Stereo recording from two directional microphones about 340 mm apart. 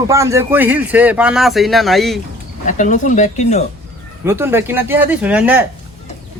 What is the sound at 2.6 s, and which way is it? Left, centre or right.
Speech, left.